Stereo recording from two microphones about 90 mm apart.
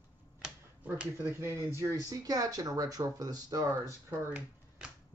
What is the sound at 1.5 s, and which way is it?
Speech, 30° right (ahead or behind).